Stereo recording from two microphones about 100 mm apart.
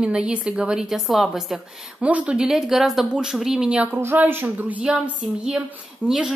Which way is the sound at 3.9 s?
20° right (ahead or behind).